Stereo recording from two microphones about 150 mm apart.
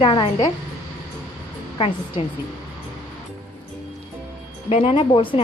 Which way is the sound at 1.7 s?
40° left (ahead or behind).